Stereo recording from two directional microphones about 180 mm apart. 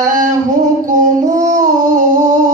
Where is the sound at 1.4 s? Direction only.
45° right (ahead or behind).